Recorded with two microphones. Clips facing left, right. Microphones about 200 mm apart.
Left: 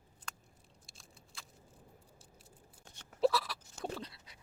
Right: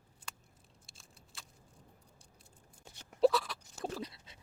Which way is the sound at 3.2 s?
Centre (ahead or behind).